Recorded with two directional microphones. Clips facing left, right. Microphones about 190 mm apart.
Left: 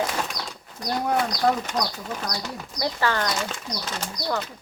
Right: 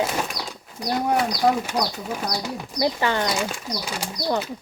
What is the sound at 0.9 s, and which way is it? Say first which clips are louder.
Speech: right 2 dB; 5° right (ahead or behind).